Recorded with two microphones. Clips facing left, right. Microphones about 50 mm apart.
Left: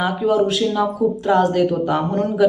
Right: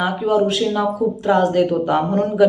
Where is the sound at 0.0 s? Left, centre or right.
Centre.